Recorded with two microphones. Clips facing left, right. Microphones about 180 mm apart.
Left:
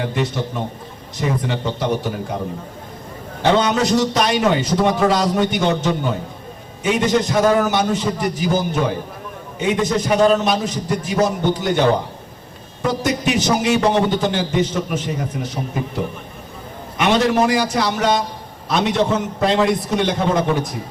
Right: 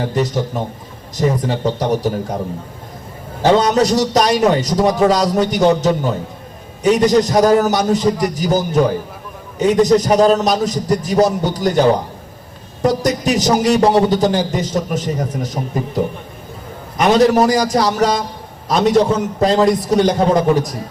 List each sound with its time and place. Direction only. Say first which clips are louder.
0.0 s a man's voice: right 4 dB; 40° right (ahead or behind)
3.5 s a man's voice: right 3 dB; 40° right (ahead or behind)
17.0 s a man's voice: right 4 dB; 40° right (ahead or behind)